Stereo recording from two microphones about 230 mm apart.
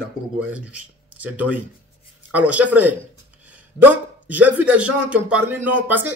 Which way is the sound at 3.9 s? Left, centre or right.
Centre.